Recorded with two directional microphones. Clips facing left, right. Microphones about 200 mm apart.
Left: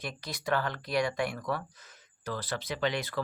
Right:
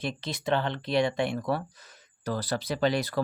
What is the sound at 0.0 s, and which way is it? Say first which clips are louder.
Speech: right 5 dB; 25° right (ahead or behind).